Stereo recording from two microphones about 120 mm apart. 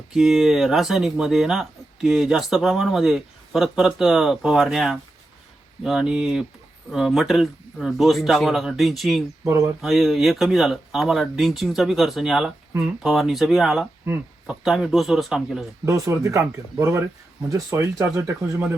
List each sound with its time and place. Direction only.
0.1 s speech: centre (ahead or behind)
15.9 s speech: 25° right (ahead or behind)